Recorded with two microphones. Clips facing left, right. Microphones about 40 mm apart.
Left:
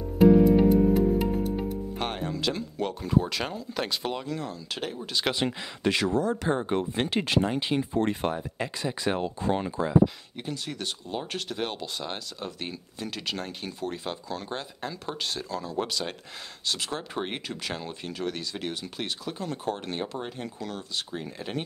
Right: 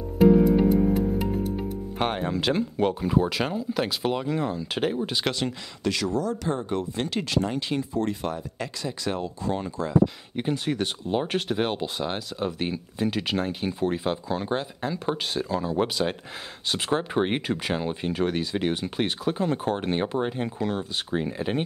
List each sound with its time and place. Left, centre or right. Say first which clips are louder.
0.2 s music: even; centre
2.0 s speech: right 8 dB; centre
2.3 s speech: right 5 dB; right
2.9 s speech: right 3 dB; centre
4.3 s speech: right 6 dB; right
5.3 s speech: left 1 dB; left
7.9 s speech: left 1 dB; left
10.3 s speech: right 8 dB; right